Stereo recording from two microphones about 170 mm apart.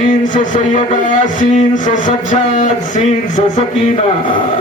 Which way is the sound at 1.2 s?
50° left (ahead or behind).